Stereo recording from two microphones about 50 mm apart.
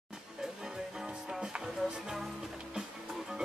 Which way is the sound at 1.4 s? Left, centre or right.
Centre.